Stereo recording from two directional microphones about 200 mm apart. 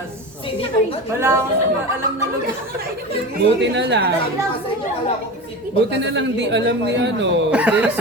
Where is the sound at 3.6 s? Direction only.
60° right (ahead or behind).